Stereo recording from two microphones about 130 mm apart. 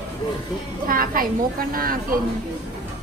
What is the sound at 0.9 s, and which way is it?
A woman's voice, 90° right.